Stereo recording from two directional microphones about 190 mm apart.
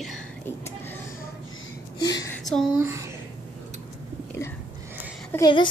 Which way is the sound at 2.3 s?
Centre (ahead or behind).